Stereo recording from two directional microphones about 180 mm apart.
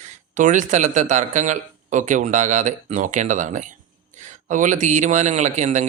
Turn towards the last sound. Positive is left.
turn(degrees=-40)  # may be behind; listen again after turning